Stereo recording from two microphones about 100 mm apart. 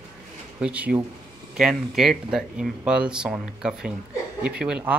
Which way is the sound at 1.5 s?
5° right (ahead or behind).